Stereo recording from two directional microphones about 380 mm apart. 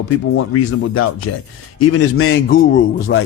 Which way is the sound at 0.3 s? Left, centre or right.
Left.